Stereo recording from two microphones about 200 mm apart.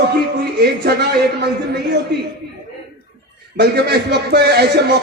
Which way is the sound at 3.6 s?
55° right (ahead or behind).